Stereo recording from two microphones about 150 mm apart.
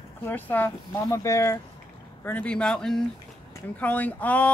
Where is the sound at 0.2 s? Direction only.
10° left (ahead or behind).